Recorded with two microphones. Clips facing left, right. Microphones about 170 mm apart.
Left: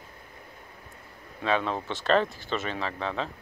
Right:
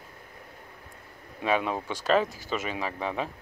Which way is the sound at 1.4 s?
10° right (ahead or behind).